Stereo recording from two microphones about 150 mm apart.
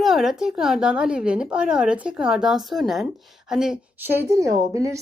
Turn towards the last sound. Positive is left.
turn(degrees=-20)  # may be behind; listen again after turning